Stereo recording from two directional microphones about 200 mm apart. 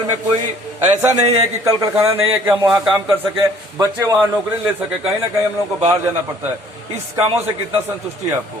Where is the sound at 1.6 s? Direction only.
15° right (ahead or behind).